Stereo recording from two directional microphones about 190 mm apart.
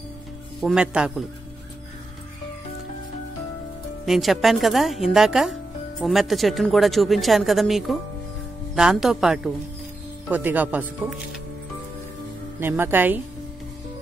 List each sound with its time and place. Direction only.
0.6 s a woman's voice: 5° right (ahead or behind)
4.0 s a woman's voice: centre (ahead or behind)
12.5 s speech: 10° right (ahead or behind)